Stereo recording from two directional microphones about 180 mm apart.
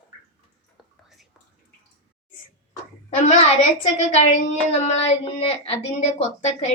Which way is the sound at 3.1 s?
40° left (ahead or behind).